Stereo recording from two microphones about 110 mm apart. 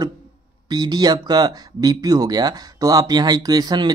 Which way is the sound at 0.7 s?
40° right (ahead or behind).